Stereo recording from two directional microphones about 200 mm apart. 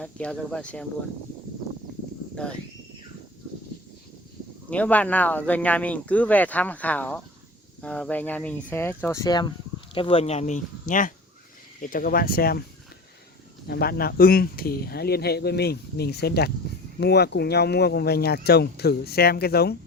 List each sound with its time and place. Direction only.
0.0 s speech: 5° left (ahead or behind)
2.4 s speech: 5° left (ahead or behind)
4.7 s speech: 5° left (ahead or behind); by 12.6 s 50° left (ahead or behind)
13.7 s speech: 50° left (ahead or behind)